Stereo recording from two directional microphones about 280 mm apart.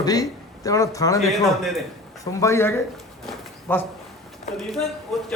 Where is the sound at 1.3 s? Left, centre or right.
Centre.